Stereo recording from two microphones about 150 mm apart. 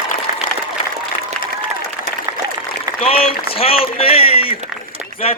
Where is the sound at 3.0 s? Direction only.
40° left (ahead or behind).